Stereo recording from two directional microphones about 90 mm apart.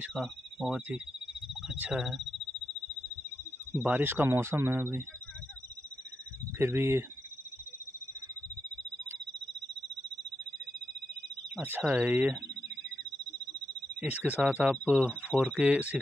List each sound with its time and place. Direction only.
0.7 s speech: 15° right (ahead or behind)
3.7 s speech: 20° right (ahead or behind)
6.6 s speech: 25° right (ahead or behind)
11.8 s speech: 15° right (ahead or behind)
14.0 s speech: 15° right (ahead or behind)